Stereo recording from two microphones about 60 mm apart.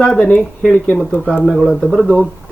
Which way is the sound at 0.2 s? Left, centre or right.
Left.